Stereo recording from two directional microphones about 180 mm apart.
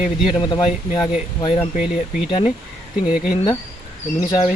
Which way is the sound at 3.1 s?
5° right (ahead or behind).